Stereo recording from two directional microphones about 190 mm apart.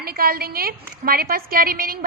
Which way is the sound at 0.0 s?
50° right (ahead or behind).